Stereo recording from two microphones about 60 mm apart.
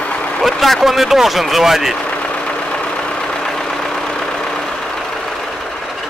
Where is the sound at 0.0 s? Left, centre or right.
Left.